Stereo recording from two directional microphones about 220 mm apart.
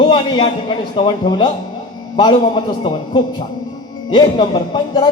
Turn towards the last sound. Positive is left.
turn(degrees=20)  # may be behind; listen again after turning